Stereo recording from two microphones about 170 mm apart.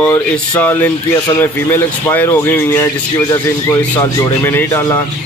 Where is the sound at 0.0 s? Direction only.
10° left (ahead or behind).